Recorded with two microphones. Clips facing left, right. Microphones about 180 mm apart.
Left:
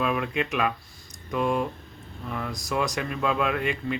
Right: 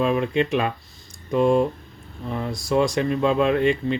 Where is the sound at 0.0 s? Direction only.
30° right (ahead or behind).